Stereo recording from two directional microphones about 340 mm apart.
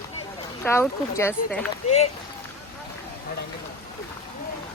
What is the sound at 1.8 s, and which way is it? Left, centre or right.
Speech, centre.